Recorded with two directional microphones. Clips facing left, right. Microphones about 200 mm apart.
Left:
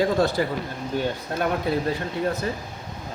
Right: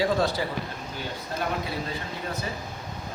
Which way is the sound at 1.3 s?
55° left (ahead or behind).